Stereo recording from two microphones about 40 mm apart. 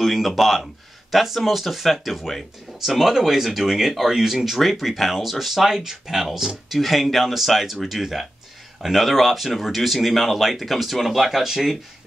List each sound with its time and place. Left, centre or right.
0.0 s speech: centre